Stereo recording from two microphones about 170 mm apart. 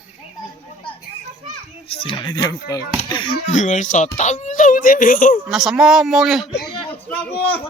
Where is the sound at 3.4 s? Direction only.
45° left (ahead or behind).